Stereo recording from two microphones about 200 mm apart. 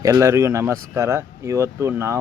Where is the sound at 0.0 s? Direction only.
15° right (ahead or behind).